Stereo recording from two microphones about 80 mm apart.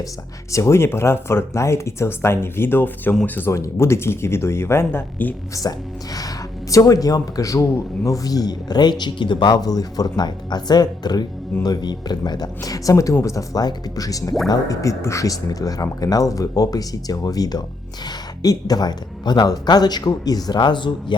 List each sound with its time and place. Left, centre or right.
0.5 s speech: left
3.5 s speech: left
5.6 s speech: left
20.6 s speech: left